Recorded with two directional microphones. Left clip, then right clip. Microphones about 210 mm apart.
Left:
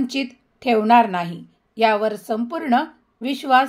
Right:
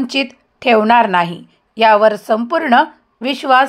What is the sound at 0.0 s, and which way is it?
Speech, 20° right (ahead or behind).